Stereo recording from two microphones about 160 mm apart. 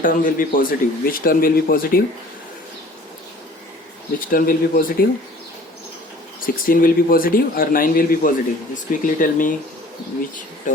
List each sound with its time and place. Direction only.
0.0 s speech: 60° left (ahead or behind)
4.3 s speech: 65° left (ahead or behind)
6.4 s speech: 60° left (ahead or behind)